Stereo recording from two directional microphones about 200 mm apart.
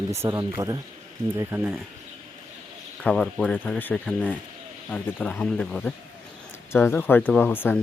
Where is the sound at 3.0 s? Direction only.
5° left (ahead or behind).